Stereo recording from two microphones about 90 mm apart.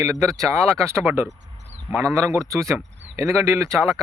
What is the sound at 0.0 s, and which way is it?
A man's voice, 35° right (ahead or behind).